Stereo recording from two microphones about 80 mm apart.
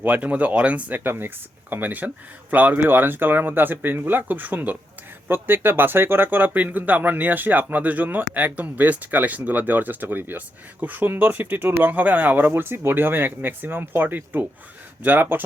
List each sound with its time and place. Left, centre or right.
0.0 s speech: centre